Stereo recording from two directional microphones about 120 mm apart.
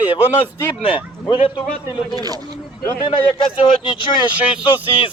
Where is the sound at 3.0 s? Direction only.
45° left (ahead or behind).